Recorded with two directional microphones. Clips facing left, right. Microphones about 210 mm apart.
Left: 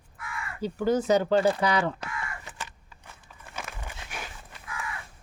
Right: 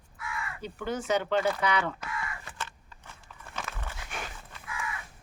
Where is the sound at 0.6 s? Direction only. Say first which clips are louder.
Left 10 dB; 35° left (ahead or behind).